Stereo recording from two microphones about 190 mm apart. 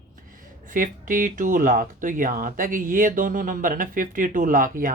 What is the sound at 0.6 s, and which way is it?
Speech, 45° right (ahead or behind).